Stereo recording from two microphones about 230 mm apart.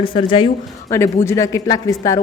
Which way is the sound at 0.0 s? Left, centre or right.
Left.